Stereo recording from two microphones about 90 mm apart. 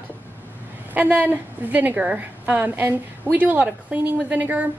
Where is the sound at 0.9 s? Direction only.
20° right (ahead or behind).